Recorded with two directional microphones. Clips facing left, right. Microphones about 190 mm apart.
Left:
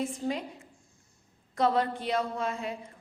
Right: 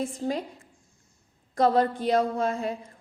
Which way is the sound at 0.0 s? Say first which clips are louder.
Right 3 dB; 35° right (ahead or behind).